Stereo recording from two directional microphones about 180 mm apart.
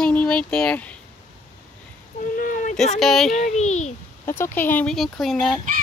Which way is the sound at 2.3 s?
45° left (ahead or behind).